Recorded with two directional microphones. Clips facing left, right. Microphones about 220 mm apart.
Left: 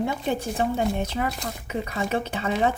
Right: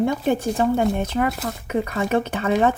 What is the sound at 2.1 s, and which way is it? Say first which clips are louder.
Speech: right 6 dB; 50° right (ahead or behind).